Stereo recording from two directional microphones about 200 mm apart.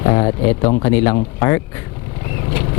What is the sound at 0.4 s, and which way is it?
Speech, 20° left (ahead or behind).